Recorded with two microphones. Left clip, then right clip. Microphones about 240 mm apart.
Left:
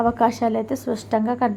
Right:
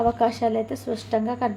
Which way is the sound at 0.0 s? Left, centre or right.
Centre.